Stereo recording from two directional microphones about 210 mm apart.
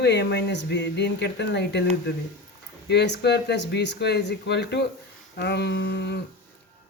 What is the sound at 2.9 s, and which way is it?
Speech, 55° left (ahead or behind).